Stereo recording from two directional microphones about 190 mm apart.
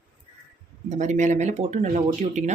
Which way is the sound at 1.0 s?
40° right (ahead or behind).